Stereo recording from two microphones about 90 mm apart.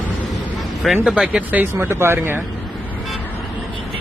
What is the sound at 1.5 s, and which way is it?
Speech, 25° right (ahead or behind).